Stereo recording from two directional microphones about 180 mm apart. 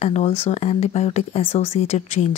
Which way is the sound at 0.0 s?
35° left (ahead or behind).